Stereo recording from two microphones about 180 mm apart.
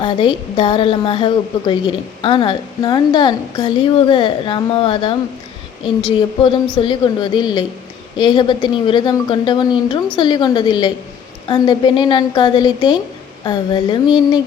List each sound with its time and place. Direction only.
0.0 s a woman's voice: 25° left (ahead or behind)